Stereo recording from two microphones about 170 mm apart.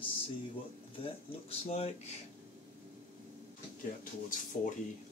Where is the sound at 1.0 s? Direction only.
35° left (ahead or behind).